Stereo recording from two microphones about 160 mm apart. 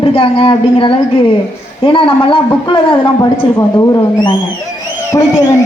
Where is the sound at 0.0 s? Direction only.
35° left (ahead or behind).